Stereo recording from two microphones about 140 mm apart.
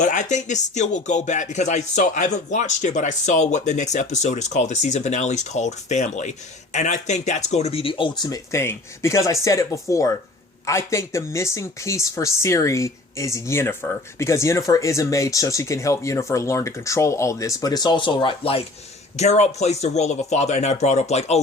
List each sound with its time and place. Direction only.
0.0 s speech: 60° left (ahead or behind); by 8.4 s 30° left (ahead or behind)
8.5 s speech: 20° left (ahead or behind); by 18.6 s 40° left (ahead or behind)
19.1 s speech: 50° left (ahead or behind)